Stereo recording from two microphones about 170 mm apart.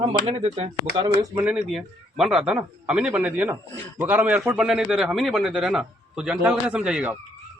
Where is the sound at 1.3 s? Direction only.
5° right (ahead or behind).